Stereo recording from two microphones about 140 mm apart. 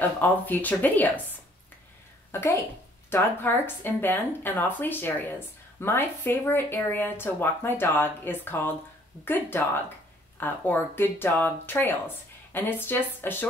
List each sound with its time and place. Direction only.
0.0 s speech: 10° left (ahead or behind)
2.3 s speech: 15° left (ahead or behind)